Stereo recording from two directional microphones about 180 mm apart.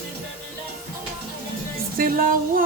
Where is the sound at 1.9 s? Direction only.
50° right (ahead or behind).